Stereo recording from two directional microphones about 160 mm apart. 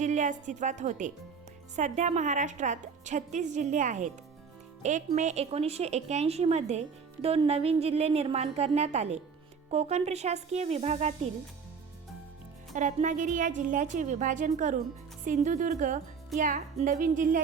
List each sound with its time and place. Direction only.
0.0 s a woman's voice: 50° right (ahead or behind)
12.7 s a woman's voice: 50° right (ahead or behind)